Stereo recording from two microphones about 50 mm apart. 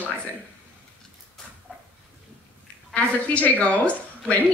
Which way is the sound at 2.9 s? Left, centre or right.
Left.